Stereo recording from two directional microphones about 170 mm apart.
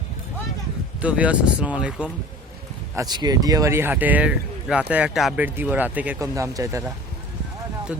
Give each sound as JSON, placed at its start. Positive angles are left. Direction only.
{"t": 1.0, "sound": "speech", "side_deg": -5}
{"t": 2.9, "sound": "speech", "side_deg": -20}